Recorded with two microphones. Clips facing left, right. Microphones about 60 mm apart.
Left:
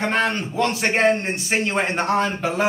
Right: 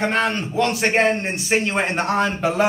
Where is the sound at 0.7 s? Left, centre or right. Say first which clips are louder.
Left 1 dB; centre.